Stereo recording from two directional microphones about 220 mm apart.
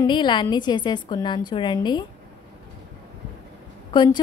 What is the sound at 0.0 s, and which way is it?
A woman's voice, 20° left (ahead or behind).